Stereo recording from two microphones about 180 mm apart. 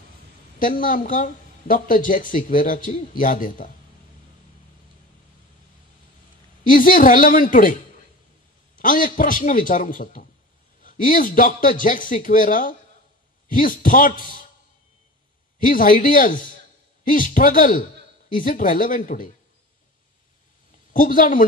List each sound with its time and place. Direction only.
0.6 s speech: 50° left (ahead or behind)
6.6 s speech: 50° left (ahead or behind)
8.7 s speech: 50° left (ahead or behind)
15.6 s speech: 50° left (ahead or behind)
20.9 s speech: 50° left (ahead or behind)